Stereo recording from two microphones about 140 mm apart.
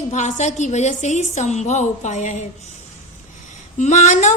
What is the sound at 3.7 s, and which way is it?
Speech, 55° left (ahead or behind).